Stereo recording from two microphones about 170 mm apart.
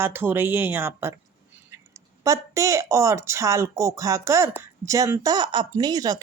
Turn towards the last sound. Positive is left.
turn(degrees=-25)  # may be behind; listen again after turning